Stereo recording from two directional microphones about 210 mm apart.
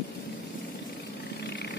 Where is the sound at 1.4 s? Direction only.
50° left (ahead or behind).